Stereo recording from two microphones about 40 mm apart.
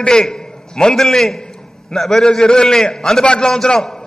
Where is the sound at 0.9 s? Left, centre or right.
Centre.